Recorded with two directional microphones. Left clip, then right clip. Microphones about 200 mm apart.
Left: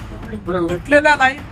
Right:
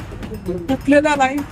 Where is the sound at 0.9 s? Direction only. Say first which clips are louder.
Left 2 dB; 20° right (ahead or behind).